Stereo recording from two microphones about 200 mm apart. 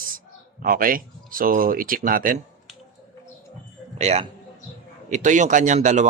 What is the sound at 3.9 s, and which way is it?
A man's voice, 35° right (ahead or behind).